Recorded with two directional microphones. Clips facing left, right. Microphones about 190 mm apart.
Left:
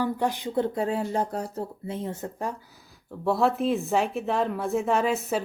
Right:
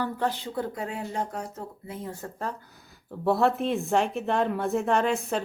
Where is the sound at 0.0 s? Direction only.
15° left (ahead or behind).